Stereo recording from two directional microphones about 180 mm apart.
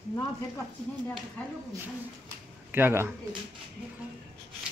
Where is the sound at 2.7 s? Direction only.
10° right (ahead or behind).